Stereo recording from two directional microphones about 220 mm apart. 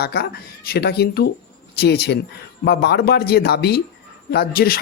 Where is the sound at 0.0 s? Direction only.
45° left (ahead or behind).